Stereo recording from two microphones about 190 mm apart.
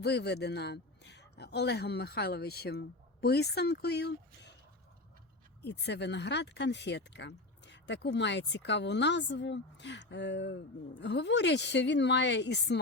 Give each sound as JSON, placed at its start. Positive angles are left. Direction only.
{"t": 0.0, "sound": "a man's voice", "side_deg": 60}
{"t": 5.6, "sound": "a woman's voice", "side_deg": 65}